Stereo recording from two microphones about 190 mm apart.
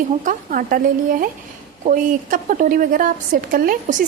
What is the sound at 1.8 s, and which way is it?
Speech, 45° right (ahead or behind).